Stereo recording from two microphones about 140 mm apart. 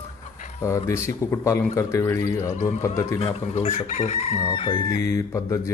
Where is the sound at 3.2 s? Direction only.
50° left (ahead or behind).